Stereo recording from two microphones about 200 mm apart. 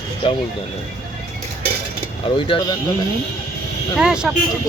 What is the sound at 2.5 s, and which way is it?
Speech, 20° left (ahead or behind).